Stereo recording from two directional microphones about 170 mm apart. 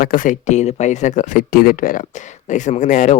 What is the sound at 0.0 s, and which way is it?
Speech, 55° left (ahead or behind).